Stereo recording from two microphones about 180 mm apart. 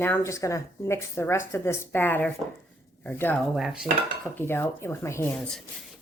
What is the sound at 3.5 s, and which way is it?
Speech, 5° right (ahead or behind).